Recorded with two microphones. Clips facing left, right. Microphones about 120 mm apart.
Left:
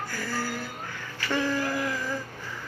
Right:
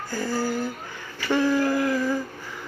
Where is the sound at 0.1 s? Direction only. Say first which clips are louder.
Right 10 dB; 25° right (ahead or behind).